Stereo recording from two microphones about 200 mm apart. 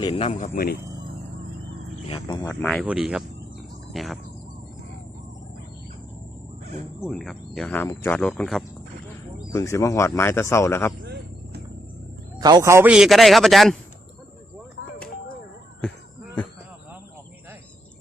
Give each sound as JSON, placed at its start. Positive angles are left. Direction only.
{"t": 0.0, "sound": "speech", "side_deg": 30}
{"t": 2.0, "sound": "speech", "side_deg": 25}
{"t": 2.5, "sound": "speech", "side_deg": 10}
{"t": 2.8, "sound": "speech", "side_deg": -5}
{"t": 7.0, "sound": "speech", "side_deg": 0}
{"t": 9.5, "sound": "speech", "side_deg": 15}
{"t": 11.0, "sound": "a sound", "side_deg": -55}
{"t": 12.4, "sound": "speech", "side_deg": -20}